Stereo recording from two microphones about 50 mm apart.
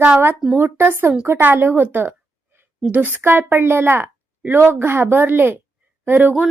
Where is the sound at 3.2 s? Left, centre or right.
Right.